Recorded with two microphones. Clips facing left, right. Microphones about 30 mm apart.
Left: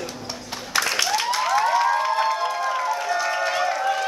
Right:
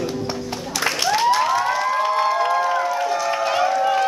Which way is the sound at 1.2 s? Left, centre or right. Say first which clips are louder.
Right 6 dB; centre.